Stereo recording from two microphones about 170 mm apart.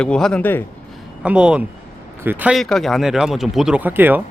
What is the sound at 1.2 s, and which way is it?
Speech, 5° right (ahead or behind).